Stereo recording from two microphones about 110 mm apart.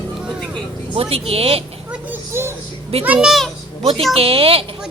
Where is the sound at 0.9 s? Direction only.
60° right (ahead or behind).